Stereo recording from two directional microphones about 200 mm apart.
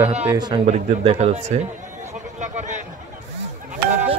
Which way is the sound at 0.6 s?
35° right (ahead or behind).